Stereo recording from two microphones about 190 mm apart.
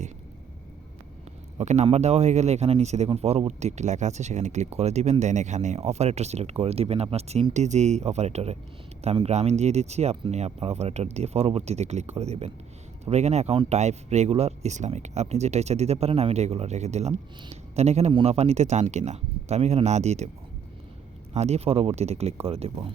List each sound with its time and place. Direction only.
1.5 s speech: 35° right (ahead or behind)
21.3 s speech: 35° right (ahead or behind)